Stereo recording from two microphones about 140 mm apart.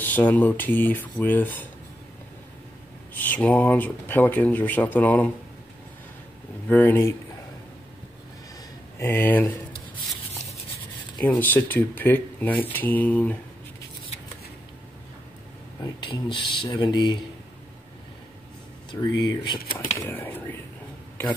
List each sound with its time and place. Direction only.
0.0 s speech: 15° left (ahead or behind)
3.2 s speech: 10° left (ahead or behind)
6.7 s speech: 15° left (ahead or behind)
8.9 s speech: 15° left (ahead or behind)
11.2 s speech: 15° left (ahead or behind)
15.8 s speech: 35° left (ahead or behind)
18.9 s speech: 30° left (ahead or behind)
20.0 s speech: 15° left (ahead or behind)